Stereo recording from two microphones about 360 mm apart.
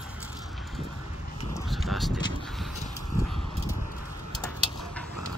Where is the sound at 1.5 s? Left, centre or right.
Centre.